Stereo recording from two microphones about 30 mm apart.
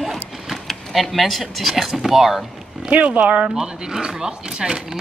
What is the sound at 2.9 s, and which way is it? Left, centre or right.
Speech, right.